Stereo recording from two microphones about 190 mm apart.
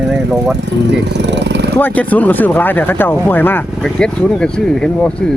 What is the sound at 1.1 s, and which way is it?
Vehicle, 65° right (ahead or behind).